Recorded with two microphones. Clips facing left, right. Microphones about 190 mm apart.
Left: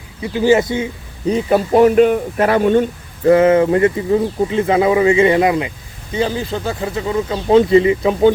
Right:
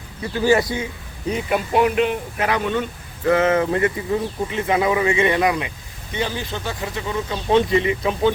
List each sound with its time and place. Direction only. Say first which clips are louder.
0.2 s speech: left 4 dB; 15° left (ahead or behind)
1.3 s speech: left 7 dB; 35° left (ahead or behind)
3.2 s speech: left 7 dB; 30° left (ahead or behind)